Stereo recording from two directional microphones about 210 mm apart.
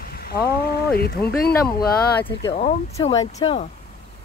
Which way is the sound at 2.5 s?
30° left (ahead or behind).